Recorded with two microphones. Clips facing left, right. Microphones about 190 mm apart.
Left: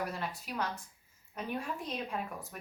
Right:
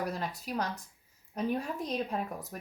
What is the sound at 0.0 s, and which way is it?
Speech, 40° right (ahead or behind).